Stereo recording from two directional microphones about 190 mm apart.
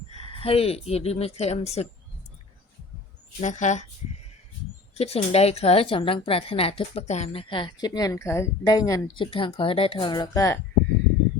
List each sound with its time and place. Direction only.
0.1 s speech: 30° left (ahead or behind)
3.4 s speech: 40° left (ahead or behind)
4.9 s a woman's voice: 30° left (ahead or behind)